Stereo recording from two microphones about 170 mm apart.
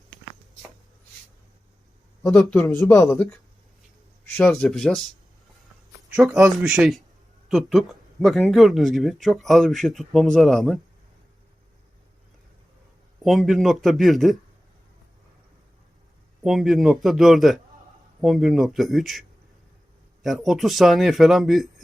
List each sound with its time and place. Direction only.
2.4 s speech: 5° left (ahead or behind)
4.4 s speech: 5° left (ahead or behind)
6.1 s speech: centre (ahead or behind)
13.2 s speech: centre (ahead or behind)
16.4 s speech: centre (ahead or behind)
20.2 s speech: centre (ahead or behind)